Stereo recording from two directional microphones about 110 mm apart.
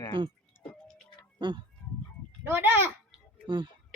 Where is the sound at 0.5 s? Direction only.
40° right (ahead or behind).